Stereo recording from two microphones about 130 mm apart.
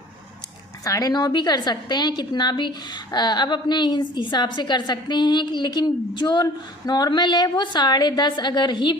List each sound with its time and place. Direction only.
0.9 s a woman's voice: 30° left (ahead or behind)